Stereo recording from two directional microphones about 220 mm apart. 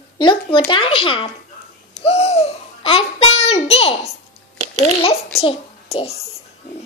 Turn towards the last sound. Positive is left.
turn(degrees=25)  # may be behind; listen again after turning